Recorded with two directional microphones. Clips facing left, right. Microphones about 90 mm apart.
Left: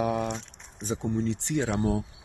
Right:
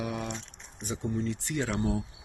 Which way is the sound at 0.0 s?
45° left (ahead or behind).